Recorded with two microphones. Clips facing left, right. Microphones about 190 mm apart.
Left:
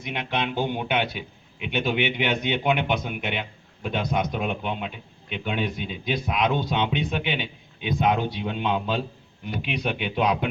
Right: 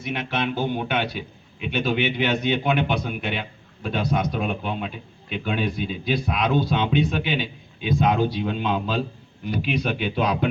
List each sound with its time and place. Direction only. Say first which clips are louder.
0.0 s a man's voice: right 2 dB; 15° left (ahead or behind)